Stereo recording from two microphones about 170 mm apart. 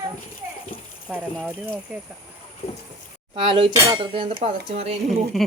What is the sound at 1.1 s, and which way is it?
Speech, 5° right (ahead or behind).